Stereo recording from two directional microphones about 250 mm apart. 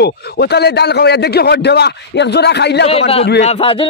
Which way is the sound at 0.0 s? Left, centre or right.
Left.